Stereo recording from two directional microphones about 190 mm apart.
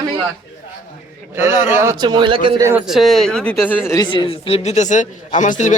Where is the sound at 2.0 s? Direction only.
25° right (ahead or behind).